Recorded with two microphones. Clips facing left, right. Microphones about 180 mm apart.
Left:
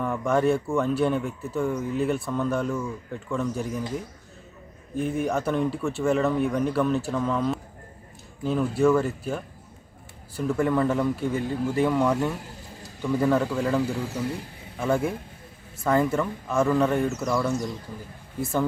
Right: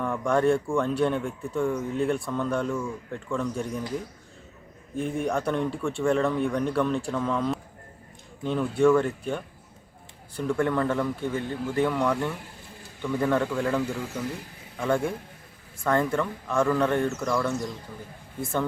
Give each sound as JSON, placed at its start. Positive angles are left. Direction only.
{"t": 0.0, "sound": "speech", "side_deg": 5}
{"t": 4.9, "sound": "speech", "side_deg": 0}
{"t": 12.1, "sound": "speech", "side_deg": 20}
{"t": 13.0, "sound": "speech", "side_deg": 5}